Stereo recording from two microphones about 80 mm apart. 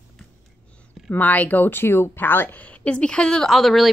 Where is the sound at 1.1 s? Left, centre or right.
Left.